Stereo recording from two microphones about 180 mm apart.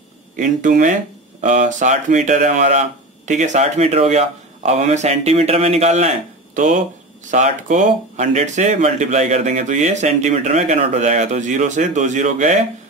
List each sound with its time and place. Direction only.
0.4 s speech: 45° right (ahead or behind)